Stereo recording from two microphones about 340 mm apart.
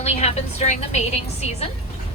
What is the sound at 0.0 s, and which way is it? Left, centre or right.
A woman's voice, centre.